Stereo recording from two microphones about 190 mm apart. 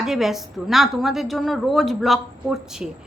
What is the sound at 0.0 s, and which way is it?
A woman's voice, centre (ahead or behind).